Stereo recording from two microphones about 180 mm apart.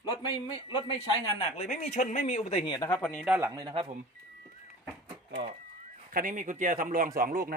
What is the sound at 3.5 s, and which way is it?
Speech, 25° right (ahead or behind).